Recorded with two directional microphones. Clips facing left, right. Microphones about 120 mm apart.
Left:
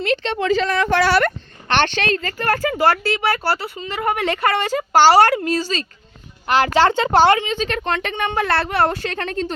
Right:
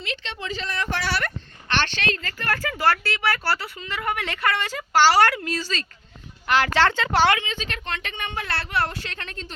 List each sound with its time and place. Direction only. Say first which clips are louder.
0.0 s a woman's voice: left 13 dB; 40° left (ahead or behind)
0.3 s a woman's voice: left 10 dB; 75° left (ahead or behind)
2.0 s speech: left 7 dB; 40° left (ahead or behind)
2.6 s speech: left 4 dB; 20° left (ahead or behind)
7.1 s speech: left 6 dB; 40° left (ahead or behind)
7.5 s a woman's voice: left 10 dB; 55° left (ahead or behind)